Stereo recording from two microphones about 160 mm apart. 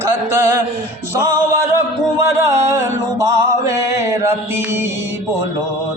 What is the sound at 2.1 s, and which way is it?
Music, 20° right (ahead or behind).